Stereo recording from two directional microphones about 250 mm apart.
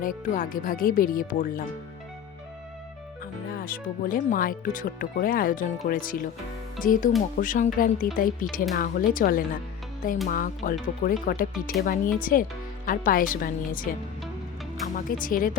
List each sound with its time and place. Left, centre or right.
0.0 s speech: left
3.6 s speech: left
14.9 s speech: left